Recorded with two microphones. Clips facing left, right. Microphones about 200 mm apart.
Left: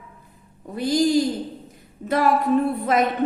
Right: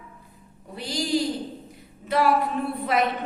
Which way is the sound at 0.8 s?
45° left (ahead or behind).